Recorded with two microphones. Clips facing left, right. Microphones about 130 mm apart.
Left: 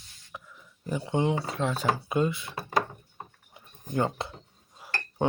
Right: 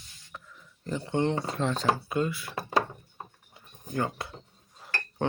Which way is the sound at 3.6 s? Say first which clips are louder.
Left 3 dB; 25° left (ahead or behind).